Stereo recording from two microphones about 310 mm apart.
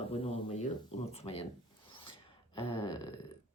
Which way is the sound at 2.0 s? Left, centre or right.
Centre.